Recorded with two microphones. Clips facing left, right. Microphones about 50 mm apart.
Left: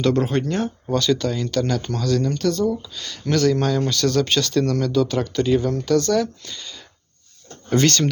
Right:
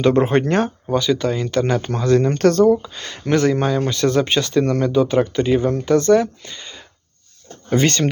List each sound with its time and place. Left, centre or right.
0.0 s speech: right
0.9 s speech: centre; by 2.4 s right
2.4 s speech: right
7.9 s speech: right